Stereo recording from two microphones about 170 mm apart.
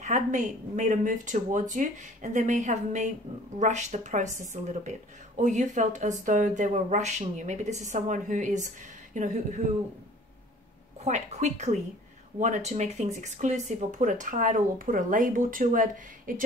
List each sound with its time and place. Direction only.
0.0 s speech: 45° right (ahead or behind)
11.1 s speech: 45° right (ahead or behind)